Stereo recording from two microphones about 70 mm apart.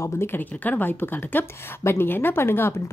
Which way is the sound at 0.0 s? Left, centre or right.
Left.